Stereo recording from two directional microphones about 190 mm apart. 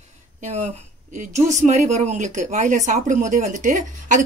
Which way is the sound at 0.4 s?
40° right (ahead or behind).